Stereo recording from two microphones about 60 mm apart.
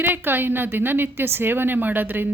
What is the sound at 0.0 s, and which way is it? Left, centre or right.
A woman's voice, right.